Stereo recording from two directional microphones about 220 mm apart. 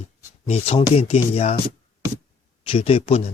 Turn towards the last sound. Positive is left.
turn(degrees=30)  # may be behind; listen again after turning